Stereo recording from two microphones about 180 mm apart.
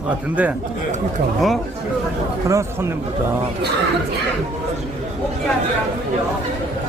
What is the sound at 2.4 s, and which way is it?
Speech, 15° right (ahead or behind).